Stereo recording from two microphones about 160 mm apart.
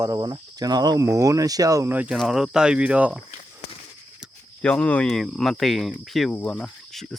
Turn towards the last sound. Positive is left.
turn(degrees=0)  # may be behind; listen again after turning